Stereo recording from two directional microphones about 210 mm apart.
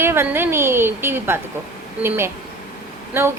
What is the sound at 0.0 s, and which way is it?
A woman's voice, 10° right (ahead or behind).